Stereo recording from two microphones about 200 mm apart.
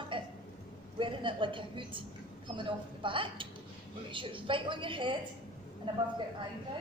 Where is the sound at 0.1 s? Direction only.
25° right (ahead or behind).